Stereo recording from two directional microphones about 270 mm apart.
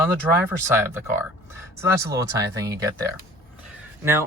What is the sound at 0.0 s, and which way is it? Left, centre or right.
Speech, centre.